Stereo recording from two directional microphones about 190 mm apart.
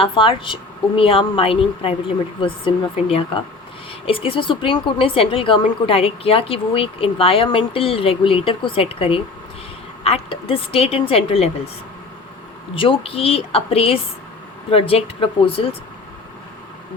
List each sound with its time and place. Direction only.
0.0 s a woman's voice: 25° left (ahead or behind)
12.7 s a woman's voice: 25° left (ahead or behind)